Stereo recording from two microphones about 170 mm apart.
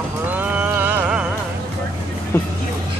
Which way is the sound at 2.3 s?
15° left (ahead or behind).